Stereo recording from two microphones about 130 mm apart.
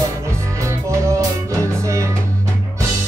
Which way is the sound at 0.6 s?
20° right (ahead or behind).